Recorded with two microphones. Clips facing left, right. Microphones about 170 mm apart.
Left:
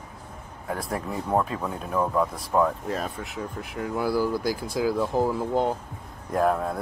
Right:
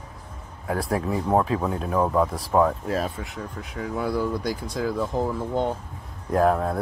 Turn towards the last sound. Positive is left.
turn(degrees=0)  # may be behind; listen again after turning